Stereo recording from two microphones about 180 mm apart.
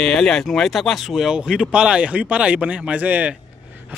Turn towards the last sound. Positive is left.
turn(degrees=-10)  # may be behind; listen again after turning